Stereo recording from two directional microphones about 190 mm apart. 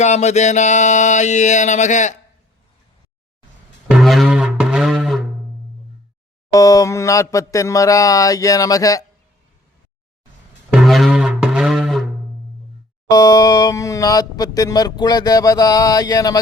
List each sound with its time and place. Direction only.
0.0 s music: 35° left (ahead or behind)
3.8 s music: centre (ahead or behind)
6.5 s mantra: 20° left (ahead or behind)
10.7 s music: centre (ahead or behind)
13.1 s speech: 20° left (ahead or behind)